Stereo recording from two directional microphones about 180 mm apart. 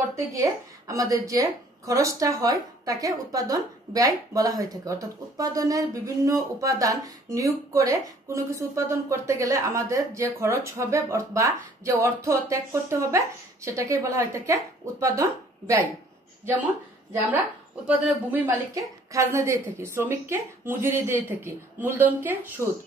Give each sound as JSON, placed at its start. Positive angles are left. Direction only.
{"t": 0.1, "sound": "a woman's voice", "side_deg": -15}
{"t": 17.8, "sound": "a woman's voice", "side_deg": -10}